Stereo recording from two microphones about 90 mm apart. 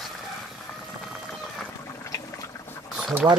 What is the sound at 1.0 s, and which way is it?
Whale vocalization, 5° right (ahead or behind).